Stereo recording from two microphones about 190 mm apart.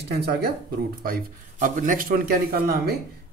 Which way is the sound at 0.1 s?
60° right (ahead or behind).